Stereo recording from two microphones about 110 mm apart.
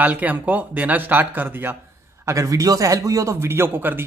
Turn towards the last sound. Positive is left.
turn(degrees=-20)  # may be behind; listen again after turning